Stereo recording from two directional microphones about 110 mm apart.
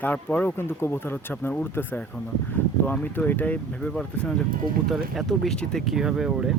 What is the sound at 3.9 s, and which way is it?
Speech, 5° left (ahead or behind).